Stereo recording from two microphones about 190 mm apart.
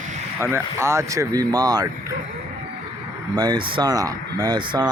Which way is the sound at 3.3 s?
20° right (ahead or behind).